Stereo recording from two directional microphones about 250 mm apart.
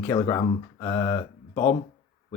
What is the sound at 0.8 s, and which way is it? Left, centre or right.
Mantra, centre.